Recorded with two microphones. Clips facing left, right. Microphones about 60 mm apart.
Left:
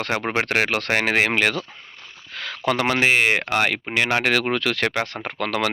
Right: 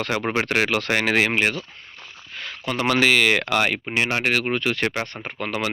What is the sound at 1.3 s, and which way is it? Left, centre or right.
Speech, left.